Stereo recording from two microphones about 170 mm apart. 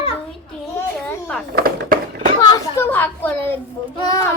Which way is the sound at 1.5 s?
60° right (ahead or behind).